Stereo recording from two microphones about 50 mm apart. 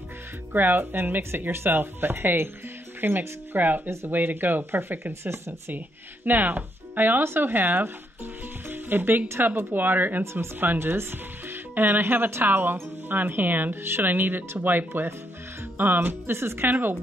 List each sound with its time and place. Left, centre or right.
0.5 s speech: right
8.6 s music: right
9.5 s speech: right
10.2 s speech: right
10.6 s speech: right
16.3 s speech: right